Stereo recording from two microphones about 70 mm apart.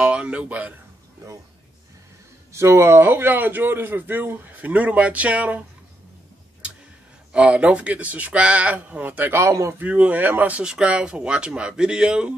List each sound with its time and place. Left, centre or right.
0.0 s a sound: centre
2.5 s a man's voice: right
7.3 s a man's voice: centre
9.3 s a man's voice: right
9.8 s a man's voice: right
10.6 s speech: centre